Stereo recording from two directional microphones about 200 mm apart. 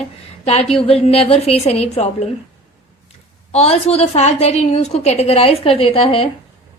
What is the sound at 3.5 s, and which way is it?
A woman's voice, 30° left (ahead or behind).